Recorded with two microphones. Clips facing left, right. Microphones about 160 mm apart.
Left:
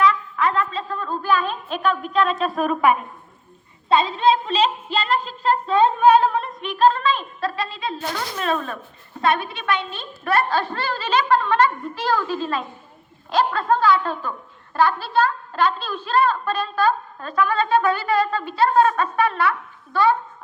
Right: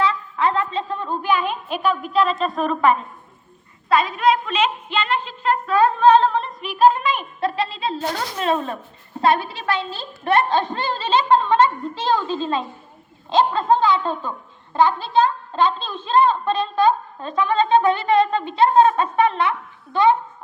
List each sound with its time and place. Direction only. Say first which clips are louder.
0.0 s a woman's voice: left 1 dB; 30° right (ahead or behind); by 3.0 s 10° left (ahead or behind)
3.8 s music: even; 25° left (ahead or behind)
6.0 s music: right 1 dB; 10° left (ahead or behind); by 8.8 s 25° right (ahead or behind)
9.2 s a woman's voice: right 2 dB; 30° right (ahead or behind)